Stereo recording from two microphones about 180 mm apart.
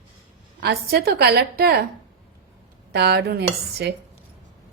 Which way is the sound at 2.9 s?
65° right (ahead or behind).